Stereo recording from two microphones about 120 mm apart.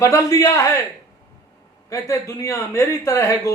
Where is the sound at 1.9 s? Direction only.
25° left (ahead or behind).